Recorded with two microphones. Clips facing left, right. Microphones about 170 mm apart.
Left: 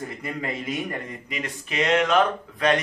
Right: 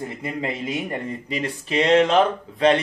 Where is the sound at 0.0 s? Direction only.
25° right (ahead or behind).